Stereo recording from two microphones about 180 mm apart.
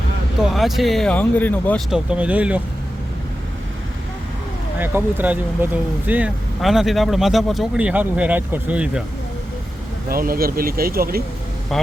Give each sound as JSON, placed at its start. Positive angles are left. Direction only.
{"t": 0.5, "sound": "speech", "side_deg": 0}
{"t": 1.9, "sound": "speech", "side_deg": -5}
{"t": 4.8, "sound": "speech", "side_deg": -10}
{"t": 10.1, "sound": "speech", "side_deg": -55}